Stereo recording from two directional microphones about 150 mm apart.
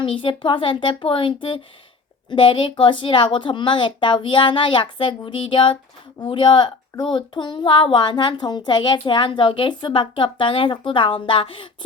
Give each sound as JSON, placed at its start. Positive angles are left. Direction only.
{"t": 0.0, "sound": "speech", "side_deg": 35}